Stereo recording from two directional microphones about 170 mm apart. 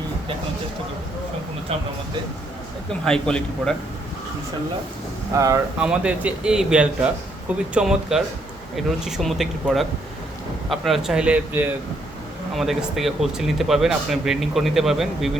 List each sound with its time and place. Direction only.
3.0 s speech: 5° left (ahead or behind)
5.3 s speech: 20° right (ahead or behind)
5.8 s a man's voice: 5° right (ahead or behind)